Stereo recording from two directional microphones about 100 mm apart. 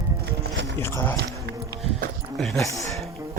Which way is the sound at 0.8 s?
25° left (ahead or behind).